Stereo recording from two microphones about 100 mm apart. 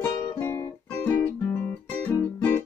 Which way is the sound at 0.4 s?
25° left (ahead or behind).